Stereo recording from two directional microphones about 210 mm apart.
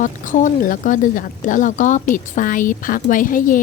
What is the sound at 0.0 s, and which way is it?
Speech, 35° left (ahead or behind).